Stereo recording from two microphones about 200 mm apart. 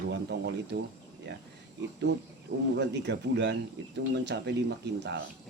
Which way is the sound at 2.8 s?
60° right (ahead or behind).